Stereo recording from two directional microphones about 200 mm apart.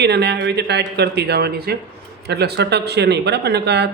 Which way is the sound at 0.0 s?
55° right (ahead or behind).